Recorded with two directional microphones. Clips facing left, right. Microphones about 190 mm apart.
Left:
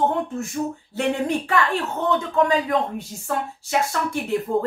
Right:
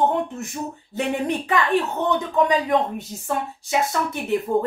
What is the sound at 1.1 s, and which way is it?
A woman's voice, 20° right (ahead or behind).